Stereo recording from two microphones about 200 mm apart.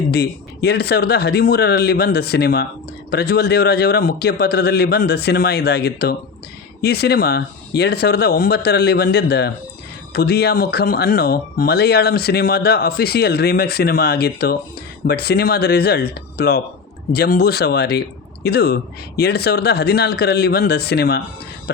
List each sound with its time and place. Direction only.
0.1 s speech: 55° left (ahead or behind)